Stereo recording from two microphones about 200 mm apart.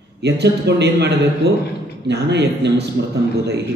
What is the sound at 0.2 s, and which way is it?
A man's voice, 55° right (ahead or behind).